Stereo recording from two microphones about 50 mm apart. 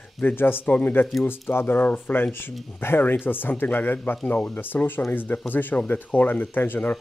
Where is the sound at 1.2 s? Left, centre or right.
Left.